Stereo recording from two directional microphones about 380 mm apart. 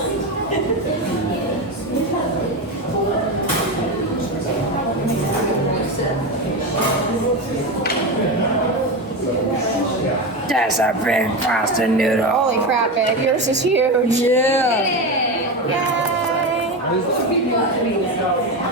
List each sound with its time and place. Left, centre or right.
10.5 s speech: centre
13.3 s a woman's voice: centre
14.3 s speech: centre